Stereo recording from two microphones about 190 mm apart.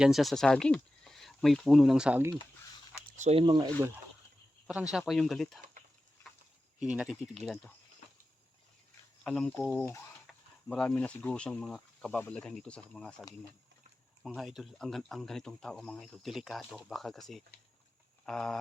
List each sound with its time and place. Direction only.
0.0 s speech: centre (ahead or behind)
3.2 s speech: 30° right (ahead or behind)
4.6 s speech: 5° right (ahead or behind)
6.7 s speech: 5° right (ahead or behind)
9.2 s speech: 5° left (ahead or behind)
14.3 s speech: centre (ahead or behind)